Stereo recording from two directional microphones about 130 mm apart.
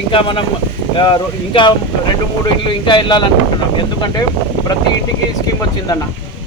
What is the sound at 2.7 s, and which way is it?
Speech, 35° left (ahead or behind).